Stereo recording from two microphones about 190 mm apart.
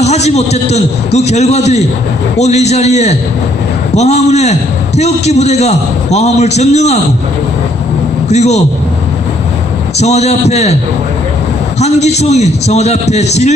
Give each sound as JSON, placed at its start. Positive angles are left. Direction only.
{"t": 0.0, "sound": "a man's voice", "side_deg": 35}
{"t": 8.3, "sound": "a man's voice", "side_deg": 35}
{"t": 9.9, "sound": "a man's voice", "side_deg": 35}
{"t": 11.8, "sound": "a man's voice", "side_deg": 35}